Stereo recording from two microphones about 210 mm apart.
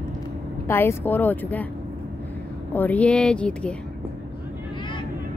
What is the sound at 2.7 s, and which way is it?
Speech, 10° left (ahead or behind).